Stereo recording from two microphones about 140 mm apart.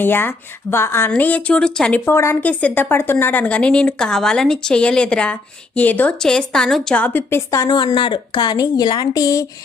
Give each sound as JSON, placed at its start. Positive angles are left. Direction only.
{"t": 0.0, "sound": "a woman's voice", "side_deg": 15}
{"t": 7.8, "sound": "a woman's voice", "side_deg": 35}